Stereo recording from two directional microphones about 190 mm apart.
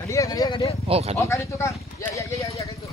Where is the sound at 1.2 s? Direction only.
15° left (ahead or behind).